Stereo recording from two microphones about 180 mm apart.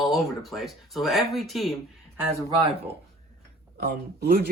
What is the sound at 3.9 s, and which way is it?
Speech, 60° right (ahead or behind).